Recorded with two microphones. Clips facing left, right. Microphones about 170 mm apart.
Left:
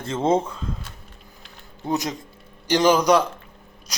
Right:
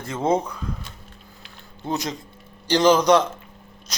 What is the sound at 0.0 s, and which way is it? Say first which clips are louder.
Speech: left 1 dB; 25° left (ahead or behind).